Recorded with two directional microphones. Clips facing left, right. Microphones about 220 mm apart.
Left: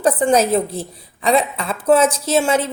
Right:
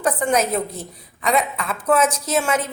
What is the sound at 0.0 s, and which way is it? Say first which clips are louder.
A woman's voice: left 5 dB; 30° left (ahead or behind).